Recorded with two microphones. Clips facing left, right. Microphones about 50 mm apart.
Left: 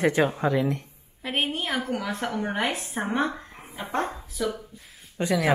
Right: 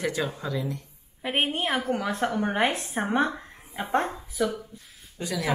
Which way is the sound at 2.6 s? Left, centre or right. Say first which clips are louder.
Right 2 dB; right.